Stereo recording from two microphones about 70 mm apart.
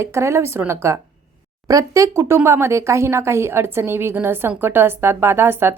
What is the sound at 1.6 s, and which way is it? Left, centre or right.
A woman's voice, right.